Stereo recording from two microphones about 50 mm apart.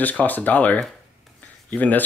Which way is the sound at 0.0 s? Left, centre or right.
Left.